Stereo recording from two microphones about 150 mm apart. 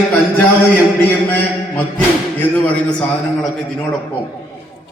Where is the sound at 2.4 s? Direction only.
10° left (ahead or behind).